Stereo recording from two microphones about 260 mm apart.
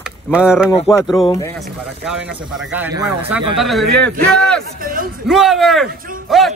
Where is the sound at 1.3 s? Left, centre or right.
Centre.